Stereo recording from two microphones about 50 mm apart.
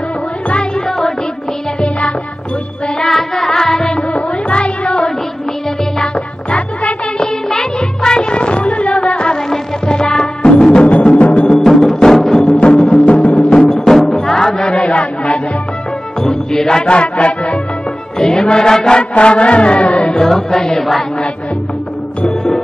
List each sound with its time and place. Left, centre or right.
0.8 s music: centre
1.8 s music: left
3.0 s music: centre
6.5 s music: left
7.4 s music: centre
11.5 s music: centre; by 13.3 s left
13.5 s music: centre
20.2 s music: centre
22.2 s music: centre